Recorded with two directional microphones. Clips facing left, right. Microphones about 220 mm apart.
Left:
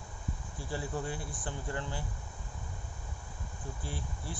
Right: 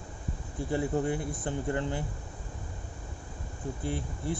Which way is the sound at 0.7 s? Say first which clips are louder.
Right 8 dB; 20° right (ahead or behind).